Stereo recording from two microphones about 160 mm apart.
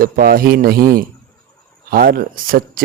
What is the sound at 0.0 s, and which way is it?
A man's voice, 65° right (ahead or behind).